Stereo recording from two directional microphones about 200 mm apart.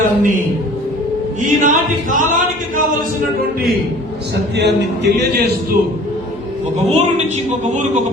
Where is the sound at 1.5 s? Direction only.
40° right (ahead or behind).